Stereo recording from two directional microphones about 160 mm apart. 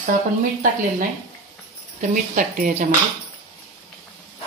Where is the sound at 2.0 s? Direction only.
55° right (ahead or behind).